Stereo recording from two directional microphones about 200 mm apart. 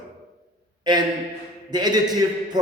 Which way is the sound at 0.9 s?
20° right (ahead or behind).